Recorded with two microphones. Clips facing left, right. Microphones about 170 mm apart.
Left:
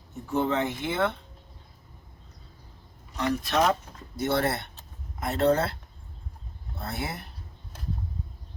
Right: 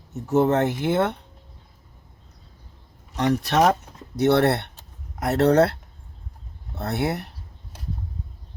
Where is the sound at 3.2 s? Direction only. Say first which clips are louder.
Right 5 dB; 70° right (ahead or behind).